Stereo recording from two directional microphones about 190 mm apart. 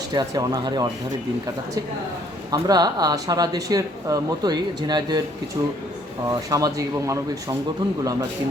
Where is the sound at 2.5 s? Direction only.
20° right (ahead or behind).